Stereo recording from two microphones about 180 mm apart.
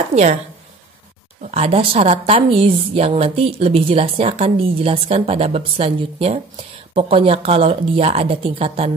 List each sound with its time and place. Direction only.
0.1 s speech: 40° right (ahead or behind)
1.4 s speech: 35° right (ahead or behind)